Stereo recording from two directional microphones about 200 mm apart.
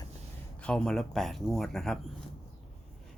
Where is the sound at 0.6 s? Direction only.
5° left (ahead or behind).